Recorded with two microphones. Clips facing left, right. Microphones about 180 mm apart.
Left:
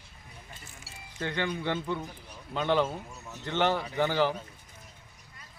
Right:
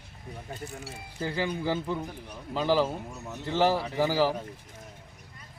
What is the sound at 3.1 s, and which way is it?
Speech, 55° right (ahead or behind).